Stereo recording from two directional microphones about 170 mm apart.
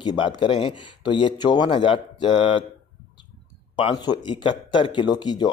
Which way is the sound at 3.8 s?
25° left (ahead or behind).